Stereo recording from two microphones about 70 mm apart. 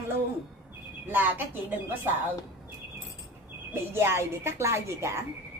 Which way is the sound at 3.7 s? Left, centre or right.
Right.